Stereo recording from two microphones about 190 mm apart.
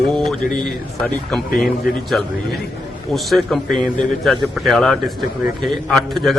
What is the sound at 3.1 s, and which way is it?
Speech, centre (ahead or behind).